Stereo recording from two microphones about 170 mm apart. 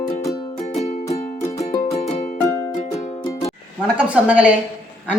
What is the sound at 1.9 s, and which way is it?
Music, 40° left (ahead or behind).